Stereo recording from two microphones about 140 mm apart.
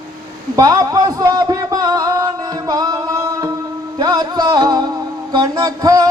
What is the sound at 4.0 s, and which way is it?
Music, 30° right (ahead or behind).